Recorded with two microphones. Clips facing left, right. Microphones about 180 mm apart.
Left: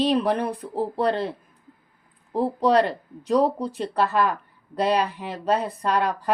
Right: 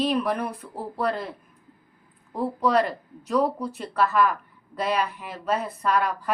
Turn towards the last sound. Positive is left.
turn(degrees=30)  # may be behind; listen again after turning